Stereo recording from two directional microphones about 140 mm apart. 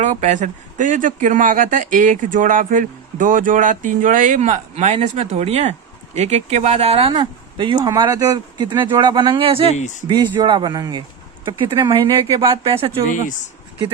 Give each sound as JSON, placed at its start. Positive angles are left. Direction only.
{"t": 0.0, "sound": "speech", "side_deg": -60}
{"t": 7.1, "sound": "speech", "side_deg": -35}
{"t": 9.7, "sound": "speech", "side_deg": 60}
{"t": 10.4, "sound": "speech", "side_deg": -35}